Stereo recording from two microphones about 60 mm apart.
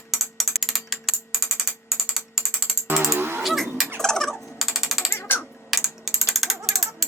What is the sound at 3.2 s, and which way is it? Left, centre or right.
Livestock, right.